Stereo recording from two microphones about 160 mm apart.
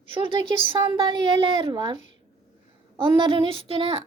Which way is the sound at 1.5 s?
30° right (ahead or behind).